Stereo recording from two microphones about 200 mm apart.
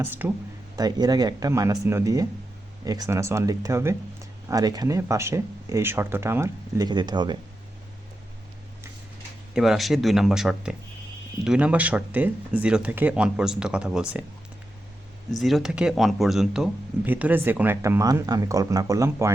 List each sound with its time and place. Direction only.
0.0 s speech: 10° right (ahead or behind)
9.6 s speech: centre (ahead or behind)
15.4 s speech: centre (ahead or behind)